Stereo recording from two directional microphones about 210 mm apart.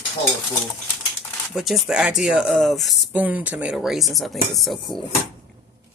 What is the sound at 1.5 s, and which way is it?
Speech, centre (ahead or behind).